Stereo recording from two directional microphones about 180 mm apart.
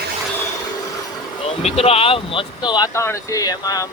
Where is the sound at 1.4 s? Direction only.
35° left (ahead or behind).